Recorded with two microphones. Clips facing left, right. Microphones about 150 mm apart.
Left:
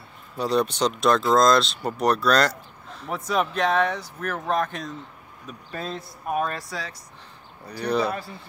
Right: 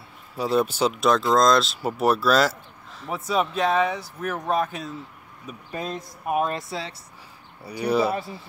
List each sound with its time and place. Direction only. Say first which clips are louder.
0.4 s speech: right 1 dB; 5° right (ahead or behind)
6.5 s speech: right 3 dB; 25° right (ahead or behind)
7.6 s speech: right 2 dB; 5° right (ahead or behind)